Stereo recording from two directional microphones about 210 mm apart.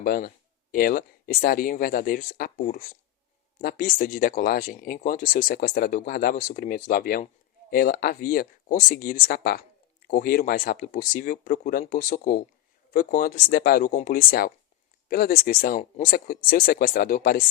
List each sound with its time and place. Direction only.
0.0 s speech: 45° left (ahead or behind)